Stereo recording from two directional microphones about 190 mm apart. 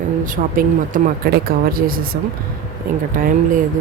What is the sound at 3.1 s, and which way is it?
Speech, 45° right (ahead or behind).